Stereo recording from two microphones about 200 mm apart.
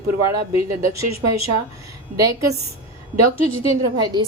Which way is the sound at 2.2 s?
15° right (ahead or behind).